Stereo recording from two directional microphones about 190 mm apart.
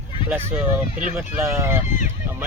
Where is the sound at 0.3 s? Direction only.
10° right (ahead or behind).